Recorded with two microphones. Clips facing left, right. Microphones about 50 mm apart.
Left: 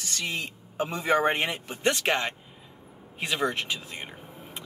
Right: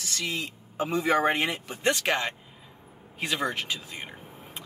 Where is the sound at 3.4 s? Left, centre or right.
Left.